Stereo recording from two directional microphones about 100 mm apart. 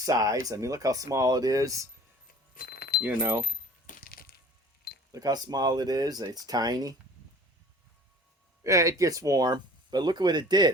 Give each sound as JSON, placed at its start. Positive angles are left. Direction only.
{"t": 0.0, "sound": "speech", "side_deg": -35}
{"t": 3.2, "sound": "keys jangling", "side_deg": -25}
{"t": 5.1, "sound": "speech", "side_deg": -40}
{"t": 8.6, "sound": "speech", "side_deg": -30}